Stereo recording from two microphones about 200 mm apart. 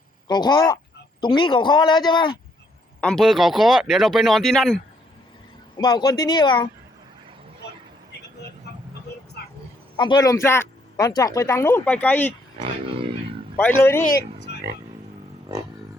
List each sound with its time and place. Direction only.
0.3 s a man's voice: 20° left (ahead or behind)
3.0 s speech: centre (ahead or behind)
5.7 s a man's voice: 20° left (ahead or behind)
8.7 s vehicle: 55° left (ahead or behind)
10.0 s speech: 20° left (ahead or behind)
13.6 s speech: 10° left (ahead or behind)
14.1 s speech: 55° left (ahead or behind)